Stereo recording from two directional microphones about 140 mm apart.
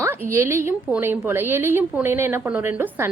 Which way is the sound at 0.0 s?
20° right (ahead or behind).